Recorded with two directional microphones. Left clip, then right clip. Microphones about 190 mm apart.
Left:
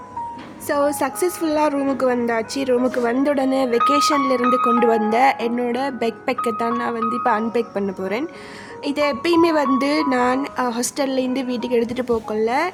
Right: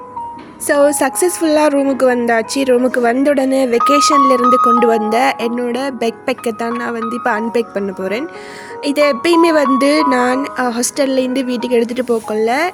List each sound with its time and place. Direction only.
0.7 s a woman's voice: 20° right (ahead or behind)